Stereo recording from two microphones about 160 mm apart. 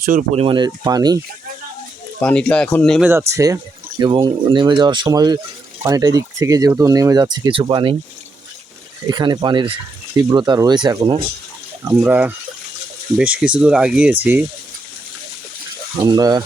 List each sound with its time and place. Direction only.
0.0 s speech: 60° right (ahead or behind)
0.3 s speech: 30° right (ahead or behind)
2.2 s speech: 5° left (ahead or behind)
3.0 s speech: 15° right (ahead or behind)
9.0 s speech: 25° right (ahead or behind)
11.9 s speech: 10° right (ahead or behind)
16.0 s speech: 25° right (ahead or behind)